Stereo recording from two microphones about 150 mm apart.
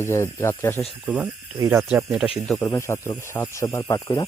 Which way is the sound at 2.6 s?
20° left (ahead or behind).